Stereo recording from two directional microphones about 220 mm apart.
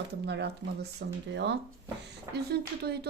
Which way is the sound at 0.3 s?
50° right (ahead or behind).